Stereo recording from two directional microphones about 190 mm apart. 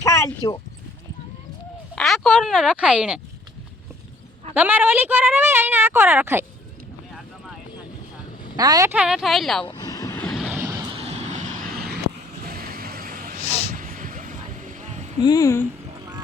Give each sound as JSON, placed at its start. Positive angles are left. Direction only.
{"t": 0.0, "sound": "a sound", "side_deg": 15}
{"t": 2.0, "sound": "speech", "side_deg": 0}
{"t": 4.5, "sound": "a woman's voice", "side_deg": -10}
{"t": 8.5, "sound": "speech", "side_deg": -20}
{"t": 9.6, "sound": "vehicle", "side_deg": 20}
{"t": 10.2, "sound": "vehicle", "side_deg": -5}
{"t": 10.9, "sound": "vehicle", "side_deg": -35}
{"t": 12.4, "sound": "a sound", "side_deg": -50}
{"t": 13.4, "sound": "a sound", "side_deg": 35}
{"t": 13.7, "sound": "vehicle", "side_deg": -45}
{"t": 15.2, "sound": "speech", "side_deg": 20}